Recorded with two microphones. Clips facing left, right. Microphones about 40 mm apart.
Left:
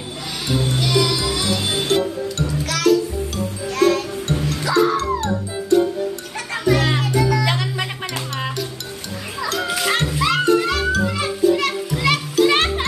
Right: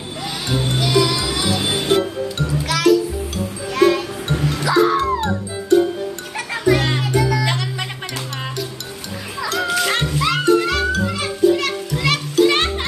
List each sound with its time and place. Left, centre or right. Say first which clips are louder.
0.7 s music: right 3 dB; centre
3.7 s music: right 2 dB; centre
6.3 s music: right 2 dB; centre